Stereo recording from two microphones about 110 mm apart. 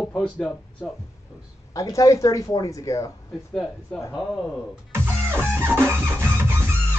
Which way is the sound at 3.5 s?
5° left (ahead or behind).